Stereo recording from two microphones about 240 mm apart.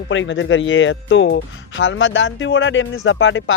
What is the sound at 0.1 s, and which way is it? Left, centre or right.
Speech, left.